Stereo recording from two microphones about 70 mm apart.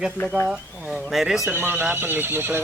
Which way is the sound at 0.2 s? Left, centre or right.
Left.